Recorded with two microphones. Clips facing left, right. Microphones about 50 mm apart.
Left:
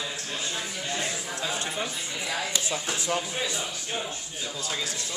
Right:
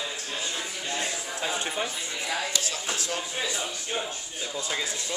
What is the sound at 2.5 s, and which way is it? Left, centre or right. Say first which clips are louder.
Speech: left 1 dB; left.